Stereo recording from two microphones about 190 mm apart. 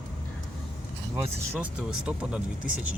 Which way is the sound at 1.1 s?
5° right (ahead or behind).